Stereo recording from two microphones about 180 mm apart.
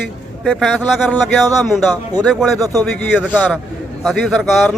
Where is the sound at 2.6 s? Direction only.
20° right (ahead or behind).